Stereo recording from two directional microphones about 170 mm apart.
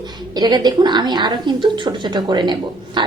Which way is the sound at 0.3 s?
25° right (ahead or behind).